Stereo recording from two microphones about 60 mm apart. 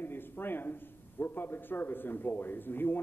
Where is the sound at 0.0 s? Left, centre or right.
Left.